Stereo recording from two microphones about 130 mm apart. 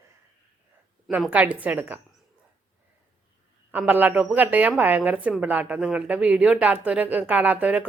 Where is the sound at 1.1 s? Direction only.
10° right (ahead or behind).